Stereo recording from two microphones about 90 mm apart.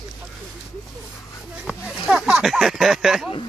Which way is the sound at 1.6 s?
Centre (ahead or behind).